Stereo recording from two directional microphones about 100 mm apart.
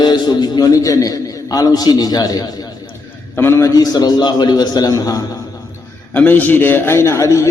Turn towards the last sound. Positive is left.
turn(degrees=30)  # may be behind; listen again after turning